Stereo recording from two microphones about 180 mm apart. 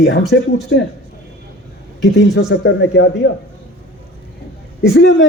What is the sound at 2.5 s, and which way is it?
Speech, 90° left.